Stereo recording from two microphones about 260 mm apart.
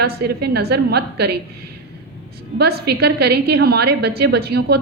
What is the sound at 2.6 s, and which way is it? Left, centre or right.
A woman's voice, right.